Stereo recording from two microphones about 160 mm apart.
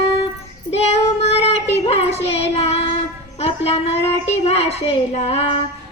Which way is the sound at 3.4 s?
40° left (ahead or behind).